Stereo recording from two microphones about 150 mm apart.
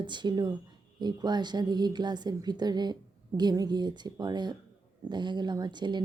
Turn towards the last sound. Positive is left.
turn(degrees=-30)  # may be behind; listen again after turning